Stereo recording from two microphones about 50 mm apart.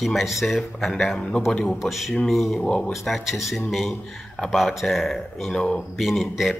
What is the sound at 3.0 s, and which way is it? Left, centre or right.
A man's voice, centre.